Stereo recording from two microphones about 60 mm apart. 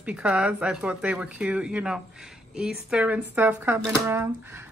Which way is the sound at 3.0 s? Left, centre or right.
Right.